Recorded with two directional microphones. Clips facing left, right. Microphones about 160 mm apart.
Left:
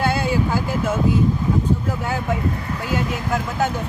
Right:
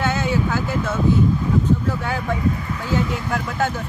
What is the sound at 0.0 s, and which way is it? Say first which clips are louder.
Vehicle: left 1 dB; 10° left (ahead or behind).